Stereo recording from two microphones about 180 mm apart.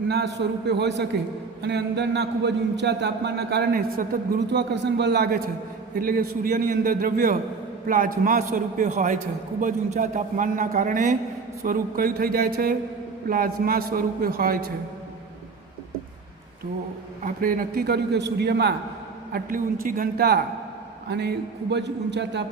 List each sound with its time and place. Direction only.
0.1 s a man's voice: 70° right (ahead or behind)
6.0 s a man's voice: 55° right (ahead or behind)
17.2 s a man's voice: 50° right (ahead or behind); by 18.7 s 70° right (ahead or behind)
19.3 s a man's voice: 50° right (ahead or behind); by 22.4 s 75° right (ahead or behind)